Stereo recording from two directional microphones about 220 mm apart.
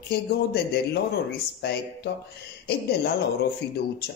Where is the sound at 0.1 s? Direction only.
45° left (ahead or behind).